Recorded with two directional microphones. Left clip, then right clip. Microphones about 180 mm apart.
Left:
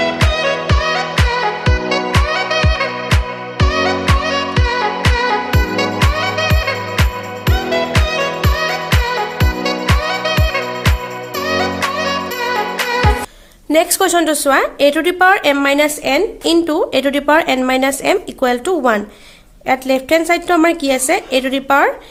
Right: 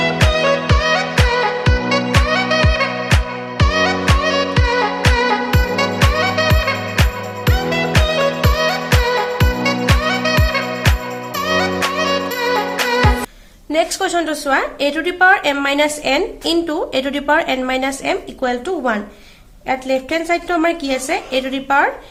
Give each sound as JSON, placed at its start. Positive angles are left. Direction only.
{"t": 0.3, "sound": "music", "side_deg": 0}
{"t": 13.7, "sound": "a woman's voice", "side_deg": 45}